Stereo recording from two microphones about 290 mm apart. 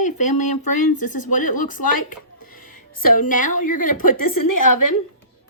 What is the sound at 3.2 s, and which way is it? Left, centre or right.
A woman's voice, left.